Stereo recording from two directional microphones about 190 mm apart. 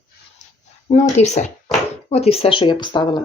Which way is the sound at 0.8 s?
35° left (ahead or behind).